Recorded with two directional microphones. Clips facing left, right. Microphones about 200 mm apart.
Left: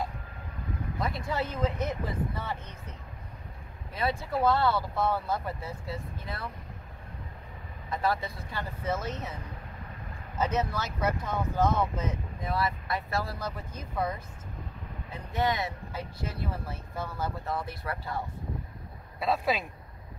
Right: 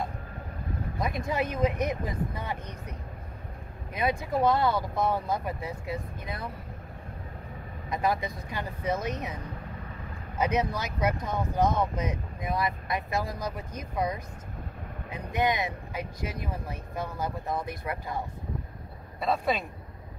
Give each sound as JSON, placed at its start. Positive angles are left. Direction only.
{"t": 0.9, "sound": "speech", "side_deg": -15}
{"t": 3.9, "sound": "speech", "side_deg": -15}
{"t": 7.9, "sound": "speech", "side_deg": -15}
{"t": 19.1, "sound": "speech", "side_deg": 5}